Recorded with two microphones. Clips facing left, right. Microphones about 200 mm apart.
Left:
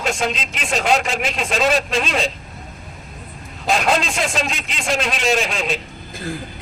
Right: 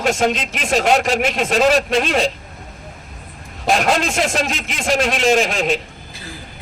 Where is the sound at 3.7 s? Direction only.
50° right (ahead or behind).